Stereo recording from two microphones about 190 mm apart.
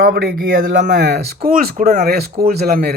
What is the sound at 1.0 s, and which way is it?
Speech, 60° right (ahead or behind).